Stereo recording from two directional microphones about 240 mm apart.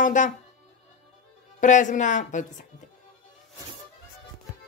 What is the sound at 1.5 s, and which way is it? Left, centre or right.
Speech, left.